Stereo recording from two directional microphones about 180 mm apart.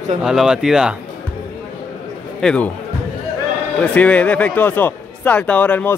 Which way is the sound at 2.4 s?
5° left (ahead or behind).